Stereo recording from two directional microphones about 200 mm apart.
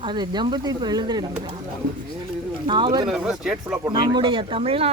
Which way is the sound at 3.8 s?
20° right (ahead or behind).